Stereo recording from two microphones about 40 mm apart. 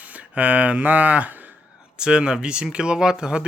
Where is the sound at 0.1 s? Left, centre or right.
Right.